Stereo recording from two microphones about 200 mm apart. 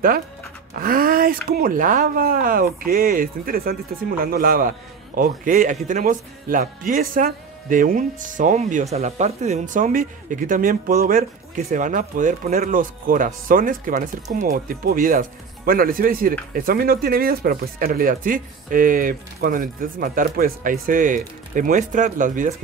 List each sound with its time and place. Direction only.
0.7 s speech: 45° right (ahead or behind)